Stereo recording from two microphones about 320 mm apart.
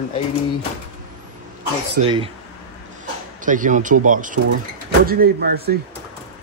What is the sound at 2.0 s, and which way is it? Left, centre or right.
Speech, centre.